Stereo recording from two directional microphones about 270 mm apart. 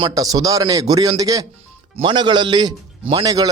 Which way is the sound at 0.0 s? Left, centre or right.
Centre.